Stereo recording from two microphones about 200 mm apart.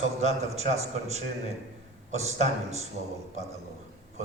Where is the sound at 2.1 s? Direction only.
35° right (ahead or behind).